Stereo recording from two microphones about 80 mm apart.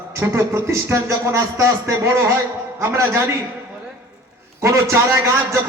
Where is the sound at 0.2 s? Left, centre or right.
Right.